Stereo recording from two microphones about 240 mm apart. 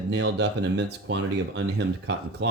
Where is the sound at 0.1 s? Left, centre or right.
Right.